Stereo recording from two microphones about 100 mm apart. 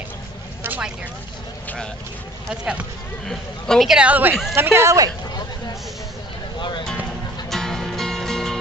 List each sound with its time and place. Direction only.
0.7 s vehicle: 15° right (ahead or behind)
2.5 s speech: 10° right (ahead or behind)
3.3 s speech: 5° left (ahead or behind)
3.9 s speech: 15° right (ahead or behind); by 5.1 s 30° right (ahead or behind)
7.4 s music: 5° left (ahead or behind)